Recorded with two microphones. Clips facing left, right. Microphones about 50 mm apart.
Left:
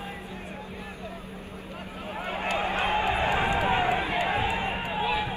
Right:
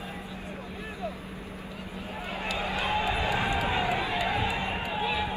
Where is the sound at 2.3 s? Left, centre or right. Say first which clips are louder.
Left 4 dB; left.